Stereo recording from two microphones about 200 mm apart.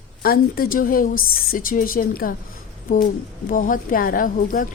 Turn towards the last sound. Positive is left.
turn(degrees=45)  # may be behind; listen again after turning